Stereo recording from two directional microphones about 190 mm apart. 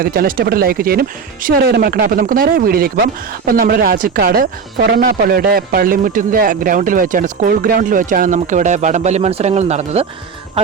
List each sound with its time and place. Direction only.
0.0 s a man's voice: 50° right (ahead or behind); by 10.1 s 35° right (ahead or behind)